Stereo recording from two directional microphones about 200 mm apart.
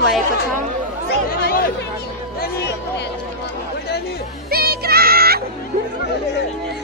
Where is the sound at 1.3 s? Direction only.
50° left (ahead or behind).